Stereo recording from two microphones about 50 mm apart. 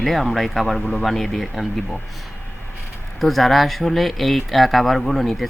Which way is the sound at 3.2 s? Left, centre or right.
Centre.